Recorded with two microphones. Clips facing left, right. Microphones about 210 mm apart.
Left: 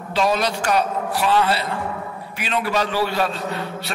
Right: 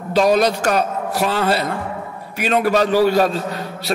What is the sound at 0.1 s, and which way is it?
A man's voice, 40° right (ahead or behind).